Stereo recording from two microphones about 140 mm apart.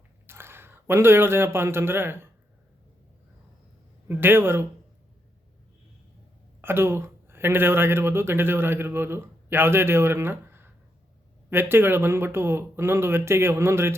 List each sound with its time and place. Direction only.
0.3 s a man's voice: 15° right (ahead or behind)
4.1 s speech: 15° right (ahead or behind)
6.6 s speech: 15° right (ahead or behind)